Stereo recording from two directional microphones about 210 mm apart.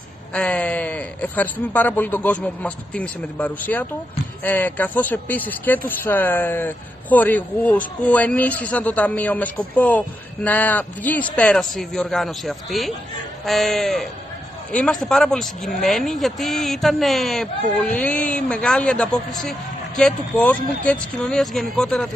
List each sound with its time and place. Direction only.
0.3 s speech: 5° left (ahead or behind)